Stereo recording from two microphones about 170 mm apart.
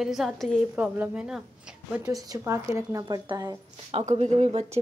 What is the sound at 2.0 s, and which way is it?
Speech, 20° right (ahead or behind).